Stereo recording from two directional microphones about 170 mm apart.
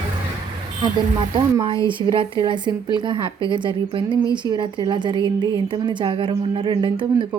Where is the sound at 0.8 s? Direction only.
25° right (ahead or behind).